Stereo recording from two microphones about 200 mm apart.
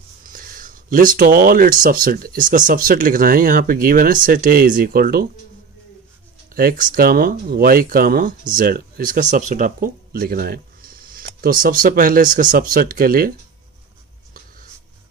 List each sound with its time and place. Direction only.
0.3 s speech: 45° right (ahead or behind)
6.5 s speech: 45° right (ahead or behind)